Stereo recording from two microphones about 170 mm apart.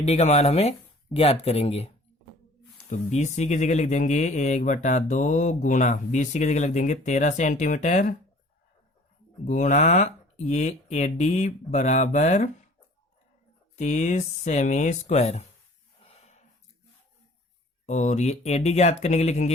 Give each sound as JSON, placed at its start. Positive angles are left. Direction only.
{"t": 0.0, "sound": "speech", "side_deg": 40}
{"t": 9.4, "sound": "speech", "side_deg": 45}
{"t": 13.7, "sound": "speech", "side_deg": 45}
{"t": 16.0, "sound": "a sound", "side_deg": 40}
{"t": 17.8, "sound": "speech", "side_deg": 40}